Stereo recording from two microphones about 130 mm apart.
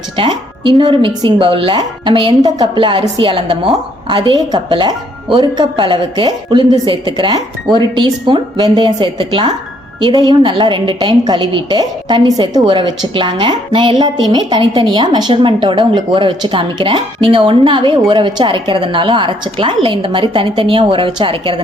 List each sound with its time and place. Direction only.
0.2 s a woman's voice: 45° right (ahead or behind)